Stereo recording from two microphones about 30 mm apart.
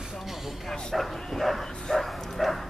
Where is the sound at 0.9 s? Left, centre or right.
Centre.